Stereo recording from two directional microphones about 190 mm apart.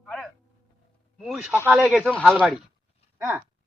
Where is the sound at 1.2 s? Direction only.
5° right (ahead or behind).